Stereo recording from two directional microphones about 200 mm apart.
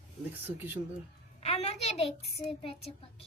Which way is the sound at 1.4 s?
30° left (ahead or behind).